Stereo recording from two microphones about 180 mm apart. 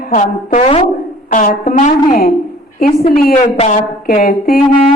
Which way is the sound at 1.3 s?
50° left (ahead or behind).